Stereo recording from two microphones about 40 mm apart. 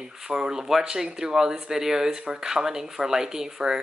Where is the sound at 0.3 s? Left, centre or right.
Centre.